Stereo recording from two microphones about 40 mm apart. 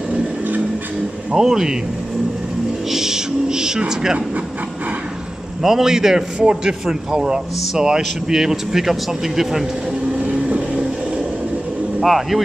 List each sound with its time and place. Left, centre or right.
1.3 s a man's voice: centre
2.9 s speech: centre
5.6 s a man's voice: centre
10.1 s vehicle: right
12.0 s speech: centre